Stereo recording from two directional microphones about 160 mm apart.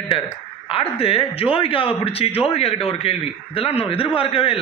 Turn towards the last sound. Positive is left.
turn(degrees=35)  # may be behind; listen again after turning